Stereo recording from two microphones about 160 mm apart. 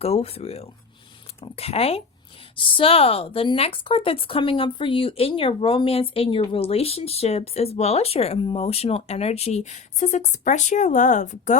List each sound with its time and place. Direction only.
0.0 s speech: 40° left (ahead or behind)